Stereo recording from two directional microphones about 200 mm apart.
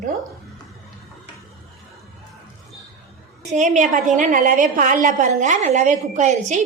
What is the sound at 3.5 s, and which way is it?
A woman's voice, 40° right (ahead or behind).